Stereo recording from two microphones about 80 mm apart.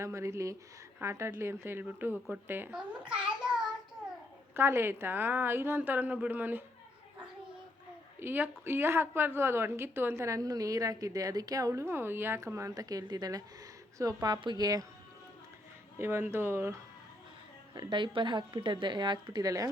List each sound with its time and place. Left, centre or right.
0.0 s a woman's voice: right
3.2 s child singing: centre
4.5 s a woman's voice: right
8.2 s a woman's voice: right
12.5 s a woman's voice: right
14.4 s speech: right
16.0 s a woman's voice: right
17.7 s a woman's voice: right
19.4 s a woman's voice: right